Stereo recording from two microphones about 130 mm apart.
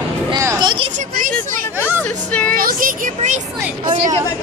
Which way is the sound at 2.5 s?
90° right.